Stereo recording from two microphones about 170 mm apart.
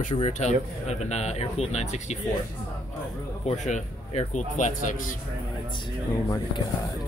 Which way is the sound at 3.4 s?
40° left (ahead or behind).